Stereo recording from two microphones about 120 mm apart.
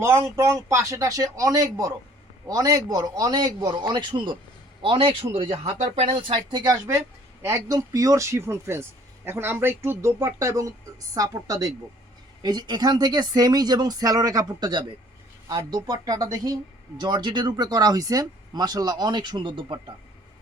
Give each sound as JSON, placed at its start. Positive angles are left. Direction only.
{"t": 0.0, "sound": "speech", "side_deg": -25}
{"t": 6.0, "sound": "speech", "side_deg": -45}